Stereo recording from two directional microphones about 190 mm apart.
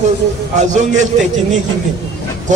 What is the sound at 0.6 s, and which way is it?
Speech, 40° right (ahead or behind).